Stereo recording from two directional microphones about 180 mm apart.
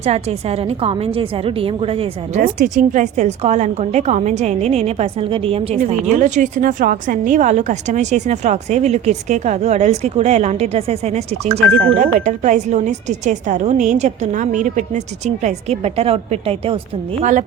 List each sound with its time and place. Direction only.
0.0 s a woman's voice: 35° right (ahead or behind)
2.4 s a woman's voice: 45° right (ahead or behind)